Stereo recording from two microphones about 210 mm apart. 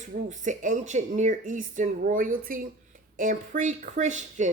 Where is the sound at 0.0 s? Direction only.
35° right (ahead or behind).